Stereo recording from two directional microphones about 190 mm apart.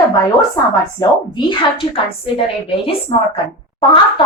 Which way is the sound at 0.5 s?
20° left (ahead or behind).